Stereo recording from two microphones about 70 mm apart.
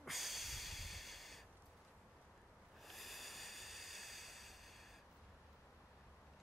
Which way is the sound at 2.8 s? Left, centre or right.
Centre.